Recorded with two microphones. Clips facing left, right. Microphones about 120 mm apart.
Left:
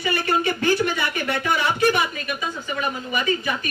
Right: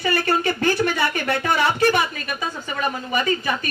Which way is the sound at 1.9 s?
45° right (ahead or behind).